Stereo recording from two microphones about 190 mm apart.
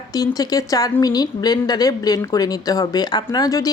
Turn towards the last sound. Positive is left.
turn(degrees=20)  # may be behind; listen again after turning